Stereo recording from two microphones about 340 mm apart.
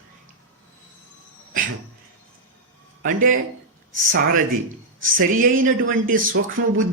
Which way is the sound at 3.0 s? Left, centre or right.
Right.